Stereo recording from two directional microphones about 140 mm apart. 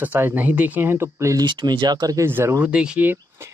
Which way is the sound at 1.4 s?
35° right (ahead or behind).